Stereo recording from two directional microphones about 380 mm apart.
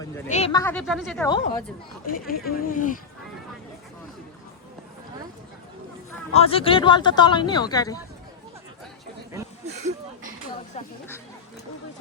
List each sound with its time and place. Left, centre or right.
0.0 s speech: centre
2.0 s speech: left
6.3 s speech: centre
9.3 s a sound: centre
10.8 s speech: centre